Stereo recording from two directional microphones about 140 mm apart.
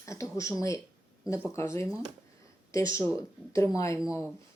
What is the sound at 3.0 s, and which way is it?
Speech, 20° left (ahead or behind).